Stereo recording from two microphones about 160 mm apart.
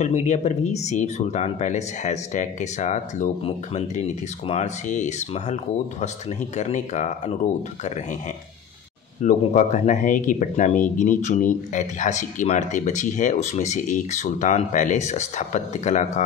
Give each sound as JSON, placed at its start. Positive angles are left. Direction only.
{"t": 0.0, "sound": "speech", "side_deg": 45}
{"t": 9.2, "sound": "speech", "side_deg": 50}